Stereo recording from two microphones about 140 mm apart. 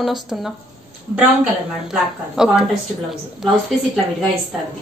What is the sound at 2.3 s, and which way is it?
Speech, 5° right (ahead or behind).